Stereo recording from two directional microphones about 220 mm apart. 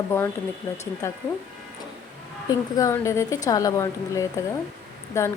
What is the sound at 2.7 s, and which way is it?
A woman's voice, 15° left (ahead or behind).